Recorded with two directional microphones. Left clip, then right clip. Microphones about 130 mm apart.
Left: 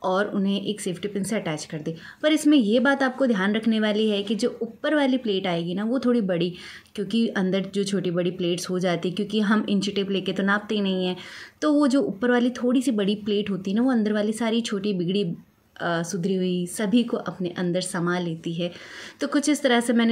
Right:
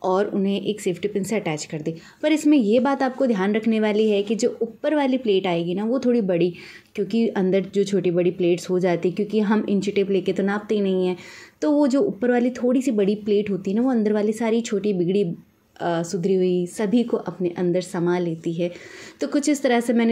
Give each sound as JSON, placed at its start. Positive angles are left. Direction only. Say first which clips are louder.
{"t": 0.0, "sound": "a woman's voice", "louder": "right 3 dB", "side_deg": -35}